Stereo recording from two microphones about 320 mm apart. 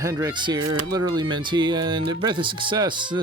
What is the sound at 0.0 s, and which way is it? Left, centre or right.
Speech, centre.